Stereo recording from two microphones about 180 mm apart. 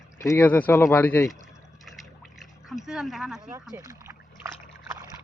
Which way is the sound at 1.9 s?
Centre (ahead or behind).